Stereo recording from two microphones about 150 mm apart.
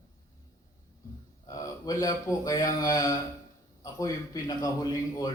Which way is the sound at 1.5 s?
25° left (ahead or behind).